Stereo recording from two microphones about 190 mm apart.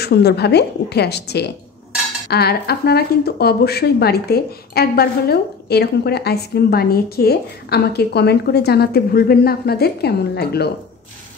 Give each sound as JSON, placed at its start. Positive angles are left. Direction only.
{"t": 0.0, "sound": "speech", "side_deg": 60}